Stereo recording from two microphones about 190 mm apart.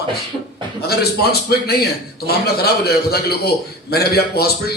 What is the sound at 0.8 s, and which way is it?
A man's voice, 55° left (ahead or behind).